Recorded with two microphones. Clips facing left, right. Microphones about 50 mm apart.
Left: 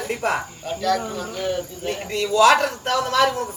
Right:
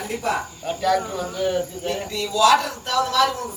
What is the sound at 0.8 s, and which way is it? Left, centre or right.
Speech, centre.